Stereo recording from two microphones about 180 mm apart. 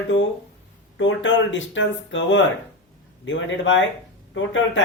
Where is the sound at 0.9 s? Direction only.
90° left.